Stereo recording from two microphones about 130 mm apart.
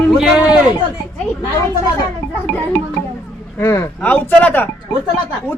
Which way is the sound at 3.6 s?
20° left (ahead or behind).